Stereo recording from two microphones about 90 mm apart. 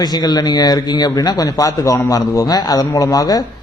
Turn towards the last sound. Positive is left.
turn(degrees=45)  # may be behind; listen again after turning